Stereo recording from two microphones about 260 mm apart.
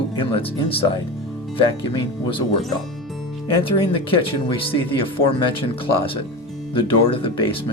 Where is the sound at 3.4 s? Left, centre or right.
Centre.